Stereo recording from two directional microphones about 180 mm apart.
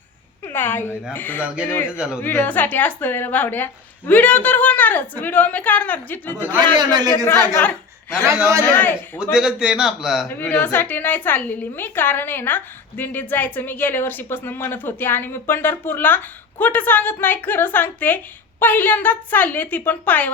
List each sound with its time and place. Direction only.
0.4 s a woman's voice: 10° left (ahead or behind)
1.9 s a man's voice: 5° right (ahead or behind)
2.2 s a woman's voice: 10° left (ahead or behind)
6.7 s a man's voice: 20° right (ahead or behind)
7.3 s speech: 15° left (ahead or behind)
8.4 s a man's voice: 15° right (ahead or behind)
8.6 s a woman's voice: 10° left (ahead or behind)
9.3 s a man's voice: 5° right (ahead or behind)
10.2 s a woman's voice: 10° left (ahead or behind)